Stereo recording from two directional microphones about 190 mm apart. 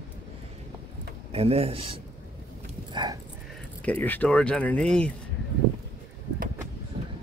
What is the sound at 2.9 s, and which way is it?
Horse, 25° right (ahead or behind).